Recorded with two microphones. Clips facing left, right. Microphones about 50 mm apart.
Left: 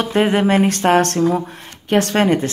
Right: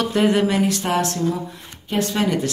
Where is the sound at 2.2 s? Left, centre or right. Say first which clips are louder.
Left 5 dB; left.